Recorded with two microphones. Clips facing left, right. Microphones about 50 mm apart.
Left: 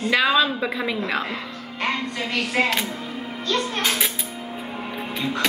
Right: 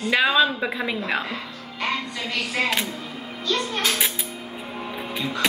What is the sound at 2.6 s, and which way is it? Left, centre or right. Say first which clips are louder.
Speech: left 3 dB; left.